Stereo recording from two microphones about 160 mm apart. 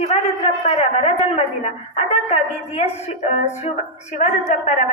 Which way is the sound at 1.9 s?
45° left (ahead or behind).